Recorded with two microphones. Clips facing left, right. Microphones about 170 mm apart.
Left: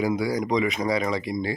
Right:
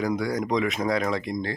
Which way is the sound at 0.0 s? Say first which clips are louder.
Left 2 dB; 5° left (ahead or behind).